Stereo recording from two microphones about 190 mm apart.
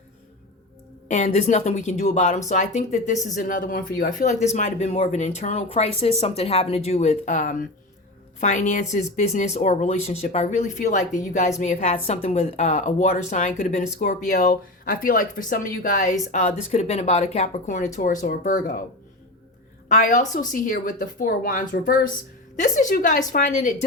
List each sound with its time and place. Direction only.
1.0 s speech: 40° left (ahead or behind)
19.9 s speech: 40° left (ahead or behind)